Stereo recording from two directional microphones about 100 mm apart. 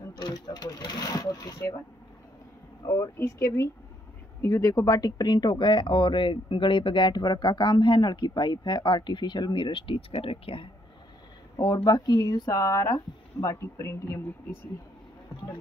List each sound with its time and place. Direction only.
0.1 s speech: 45° left (ahead or behind)
2.9 s speech: 30° left (ahead or behind); by 10.7 s 65° left (ahead or behind)
11.5 s speech: 40° left (ahead or behind)